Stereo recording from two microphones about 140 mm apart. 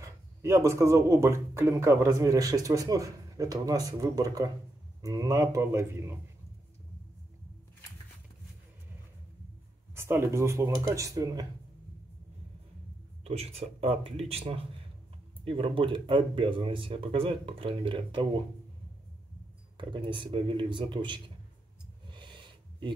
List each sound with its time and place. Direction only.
0.0 s speech: 20° right (ahead or behind)
9.9 s speech: 15° right (ahead or behind)
13.2 s speech: 45° right (ahead or behind)
19.8 s speech: 35° right (ahead or behind)
22.0 s a sound: 35° right (ahead or behind)